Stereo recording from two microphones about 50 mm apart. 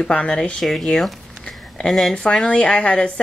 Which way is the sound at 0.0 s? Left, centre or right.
Left.